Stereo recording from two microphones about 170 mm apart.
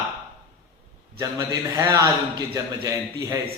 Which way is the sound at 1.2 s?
20° right (ahead or behind).